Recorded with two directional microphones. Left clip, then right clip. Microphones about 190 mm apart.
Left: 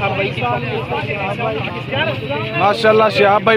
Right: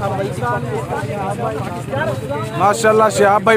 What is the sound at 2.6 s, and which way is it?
Speech, 15° right (ahead or behind).